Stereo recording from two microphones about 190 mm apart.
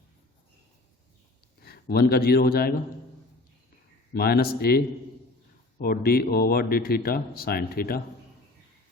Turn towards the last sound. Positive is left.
turn(degrees=55)  # may be behind; listen again after turning